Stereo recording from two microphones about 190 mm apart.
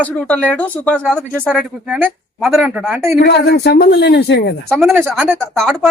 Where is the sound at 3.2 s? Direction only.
60° left (ahead or behind).